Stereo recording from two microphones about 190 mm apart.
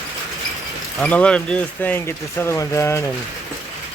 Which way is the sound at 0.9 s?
5° left (ahead or behind).